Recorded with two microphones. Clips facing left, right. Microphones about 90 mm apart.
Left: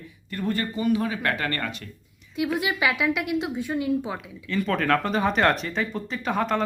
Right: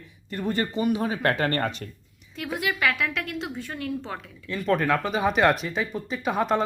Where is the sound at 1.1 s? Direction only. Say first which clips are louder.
Right 3 dB; 35° right (ahead or behind).